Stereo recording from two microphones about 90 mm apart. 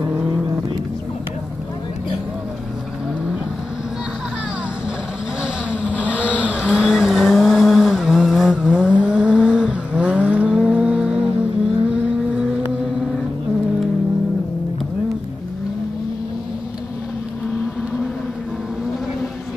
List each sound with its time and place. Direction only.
5.4 s vehicle: 15° right (ahead or behind)
6.8 s vehicle: centre (ahead or behind)